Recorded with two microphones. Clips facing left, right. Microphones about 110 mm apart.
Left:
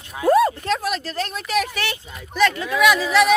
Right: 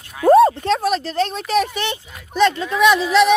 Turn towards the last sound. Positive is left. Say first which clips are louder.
# right 2 dB
turn(degrees=-25)  # may be behind; listen again after turning